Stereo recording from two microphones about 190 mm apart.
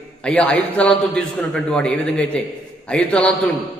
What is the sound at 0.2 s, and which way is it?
A man's voice, 5° left (ahead or behind).